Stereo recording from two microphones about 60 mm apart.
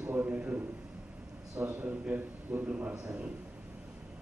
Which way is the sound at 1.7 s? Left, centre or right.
Right.